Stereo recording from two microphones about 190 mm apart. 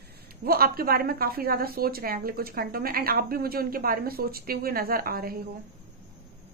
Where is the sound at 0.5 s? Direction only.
50° right (ahead or behind).